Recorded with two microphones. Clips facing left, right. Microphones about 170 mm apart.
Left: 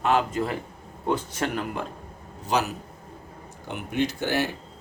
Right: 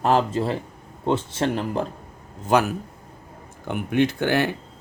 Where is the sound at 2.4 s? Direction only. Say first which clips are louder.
Right 6 dB; 50° right (ahead or behind).